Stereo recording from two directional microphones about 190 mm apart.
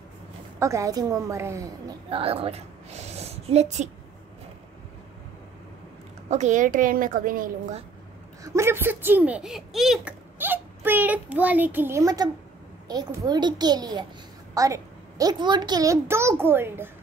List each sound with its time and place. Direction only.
0.6 s a child's voice: 15° right (ahead or behind)
2.0 s a sound: 30° right (ahead or behind)
6.3 s a woman's voice: 40° right (ahead or behind)
8.5 s a child's voice: 10° right (ahead or behind)